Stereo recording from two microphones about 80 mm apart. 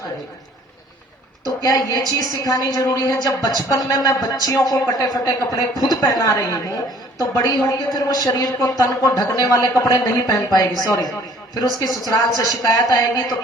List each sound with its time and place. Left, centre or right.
1.5 s a woman's voice: left